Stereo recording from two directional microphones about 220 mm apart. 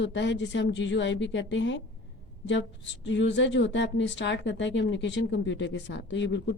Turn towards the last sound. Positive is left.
turn(degrees=55)  # may be behind; listen again after turning